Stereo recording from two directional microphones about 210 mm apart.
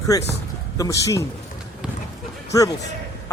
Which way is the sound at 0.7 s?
15° left (ahead or behind).